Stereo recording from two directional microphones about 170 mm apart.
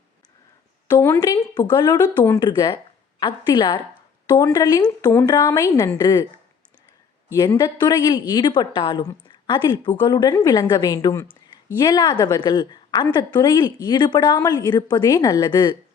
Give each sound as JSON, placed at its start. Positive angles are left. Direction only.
{"t": 1.2, "sound": "a woman's voice", "side_deg": 20}
{"t": 7.3, "sound": "a woman's voice", "side_deg": 25}